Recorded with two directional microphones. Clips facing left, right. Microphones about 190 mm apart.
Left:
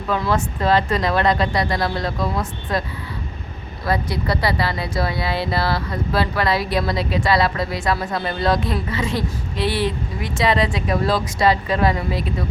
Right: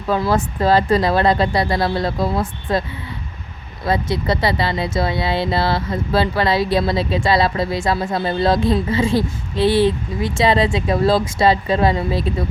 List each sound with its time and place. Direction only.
0.1 s speech: 35° right (ahead or behind)
3.8 s a woman's voice: 25° right (ahead or behind)